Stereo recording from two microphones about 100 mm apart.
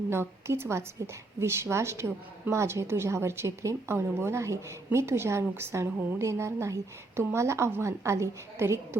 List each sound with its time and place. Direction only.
0.1 s a woman's voice: 25° right (ahead or behind)